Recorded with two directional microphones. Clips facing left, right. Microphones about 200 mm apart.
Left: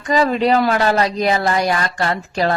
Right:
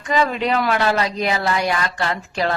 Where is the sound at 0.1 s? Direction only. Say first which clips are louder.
Left 4 dB; 35° left (ahead or behind).